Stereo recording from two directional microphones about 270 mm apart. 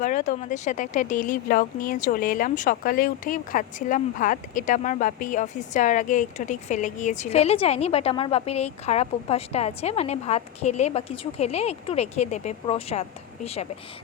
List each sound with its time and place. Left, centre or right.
0.0 s speech: left